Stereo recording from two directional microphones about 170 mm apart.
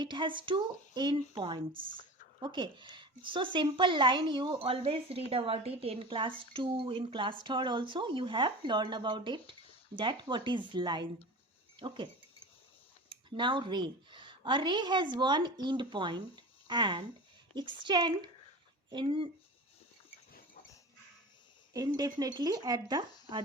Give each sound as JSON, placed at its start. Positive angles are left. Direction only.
{"t": 0.0, "sound": "a woman's voice", "side_deg": -30}
{"t": 1.7, "sound": "speech", "side_deg": -55}
{"t": 2.4, "sound": "a woman's voice", "side_deg": -25}
{"t": 13.1, "sound": "a woman's voice", "side_deg": -30}
{"t": 21.7, "sound": "a woman's voice", "side_deg": -20}